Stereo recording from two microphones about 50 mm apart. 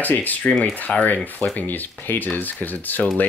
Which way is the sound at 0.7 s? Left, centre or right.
Left.